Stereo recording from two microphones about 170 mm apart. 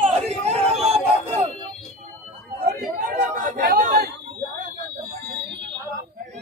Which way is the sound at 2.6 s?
50° right (ahead or behind).